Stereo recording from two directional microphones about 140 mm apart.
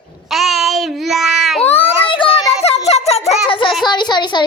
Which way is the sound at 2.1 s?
40° left (ahead or behind).